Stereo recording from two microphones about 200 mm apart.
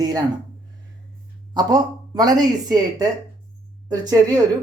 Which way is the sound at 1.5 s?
20° right (ahead or behind).